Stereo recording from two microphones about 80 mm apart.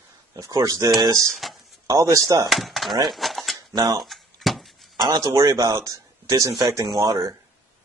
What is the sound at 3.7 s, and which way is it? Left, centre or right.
Speech, right.